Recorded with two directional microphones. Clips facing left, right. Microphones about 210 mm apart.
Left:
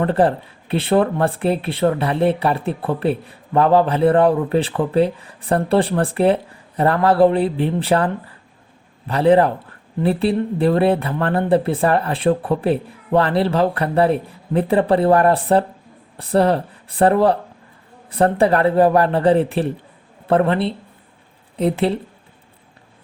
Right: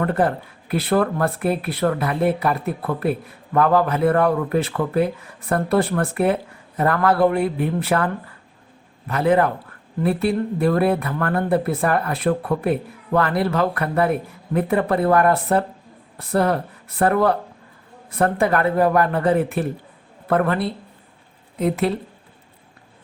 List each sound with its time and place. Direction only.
0.0 s a man's voice: 30° left (ahead or behind)